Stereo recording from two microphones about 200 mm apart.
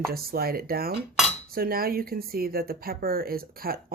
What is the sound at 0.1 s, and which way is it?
Speech, 50° right (ahead or behind).